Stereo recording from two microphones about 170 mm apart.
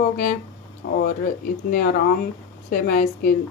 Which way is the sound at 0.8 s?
65° left (ahead or behind).